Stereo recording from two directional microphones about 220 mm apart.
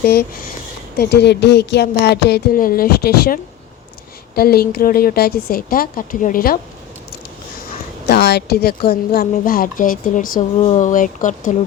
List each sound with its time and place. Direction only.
0.0 s a woman's voice: 45° left (ahead or behind)
8.0 s a woman's voice: 50° left (ahead or behind)